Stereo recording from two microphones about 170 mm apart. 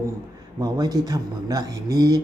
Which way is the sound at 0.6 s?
20° right (ahead or behind).